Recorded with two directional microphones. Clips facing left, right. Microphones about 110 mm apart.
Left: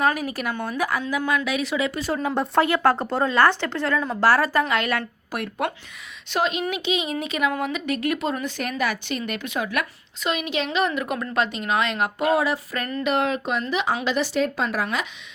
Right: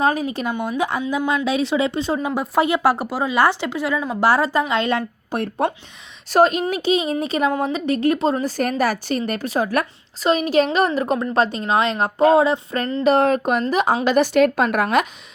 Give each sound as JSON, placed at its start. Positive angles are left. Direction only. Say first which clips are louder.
{"t": 0.0, "sound": "speech", "louder": "right 3 dB", "side_deg": -20}
{"t": 2.1, "sound": "speech", "louder": "left 1 dB", "side_deg": -10}
{"t": 6.3, "sound": "a woman's voice", "louder": "right 8 dB", "side_deg": -40}